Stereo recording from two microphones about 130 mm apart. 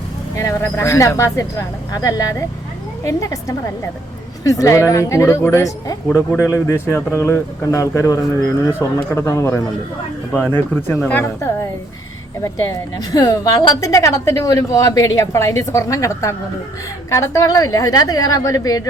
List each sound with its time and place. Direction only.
0.3 s a woman's voice: 20° left (ahead or behind)